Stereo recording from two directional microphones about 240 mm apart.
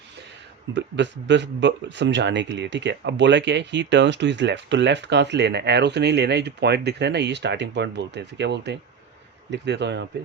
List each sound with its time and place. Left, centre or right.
0.7 s speech: right